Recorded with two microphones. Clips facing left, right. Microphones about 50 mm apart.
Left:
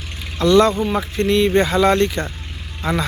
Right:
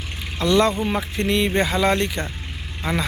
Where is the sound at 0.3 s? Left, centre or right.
Centre.